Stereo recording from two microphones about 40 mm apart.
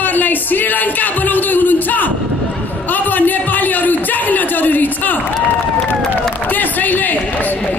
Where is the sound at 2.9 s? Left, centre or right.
Left.